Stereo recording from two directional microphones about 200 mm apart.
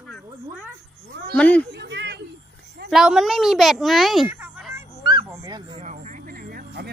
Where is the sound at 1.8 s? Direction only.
60° right (ahead or behind).